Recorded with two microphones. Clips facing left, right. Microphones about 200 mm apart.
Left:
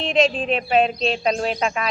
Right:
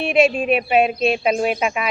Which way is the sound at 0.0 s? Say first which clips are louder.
Right 3 dB; 10° right (ahead or behind).